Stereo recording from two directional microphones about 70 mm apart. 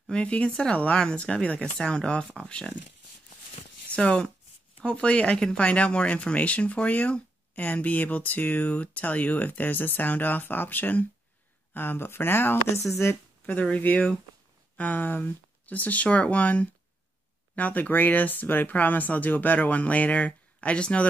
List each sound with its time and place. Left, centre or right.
0.1 s speech: centre
3.9 s speech: centre; by 13.2 s left
13.5 s speech: left